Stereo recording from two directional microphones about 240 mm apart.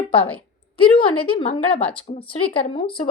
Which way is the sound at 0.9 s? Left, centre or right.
Left.